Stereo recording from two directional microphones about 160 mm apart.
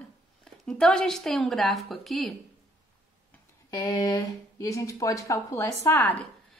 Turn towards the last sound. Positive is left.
turn(degrees=10)  # may be behind; listen again after turning